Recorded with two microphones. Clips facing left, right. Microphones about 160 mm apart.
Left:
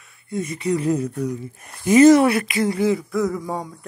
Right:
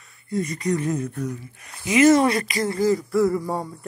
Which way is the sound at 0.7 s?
10° left (ahead or behind).